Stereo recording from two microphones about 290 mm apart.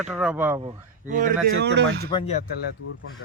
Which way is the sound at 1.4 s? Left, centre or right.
Right.